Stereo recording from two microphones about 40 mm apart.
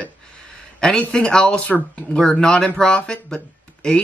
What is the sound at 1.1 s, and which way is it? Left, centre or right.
Speech, centre.